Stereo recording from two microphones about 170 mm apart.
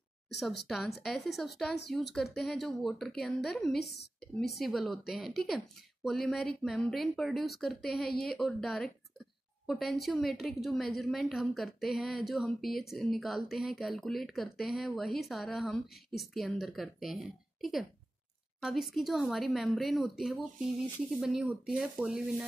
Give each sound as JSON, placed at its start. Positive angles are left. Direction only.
{"t": 0.7, "sound": "a woman's voice", "side_deg": 0}
{"t": 3.8, "sound": "speech", "side_deg": 75}
{"t": 4.6, "sound": "a woman's voice", "side_deg": 0}